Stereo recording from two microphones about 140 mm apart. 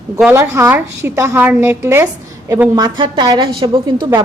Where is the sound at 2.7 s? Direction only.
30° right (ahead or behind).